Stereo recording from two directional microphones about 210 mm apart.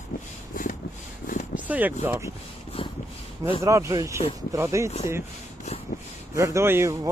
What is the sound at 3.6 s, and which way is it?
Speech, 15° right (ahead or behind).